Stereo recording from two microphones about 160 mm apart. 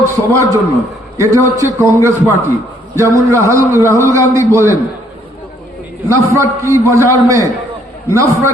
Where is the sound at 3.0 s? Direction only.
20° right (ahead or behind).